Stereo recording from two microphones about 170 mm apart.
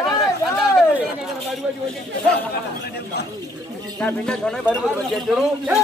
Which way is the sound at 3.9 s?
5° left (ahead or behind).